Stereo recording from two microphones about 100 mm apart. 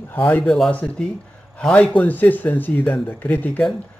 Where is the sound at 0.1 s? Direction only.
20° left (ahead or behind).